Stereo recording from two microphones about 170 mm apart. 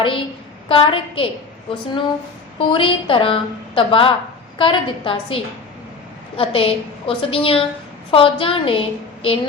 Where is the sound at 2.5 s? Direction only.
30° left (ahead or behind).